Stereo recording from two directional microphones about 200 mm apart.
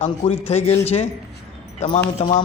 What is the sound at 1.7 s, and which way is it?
Speech, 30° left (ahead or behind).